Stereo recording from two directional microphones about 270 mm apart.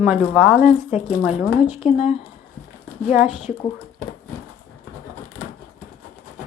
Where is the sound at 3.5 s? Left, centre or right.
Centre.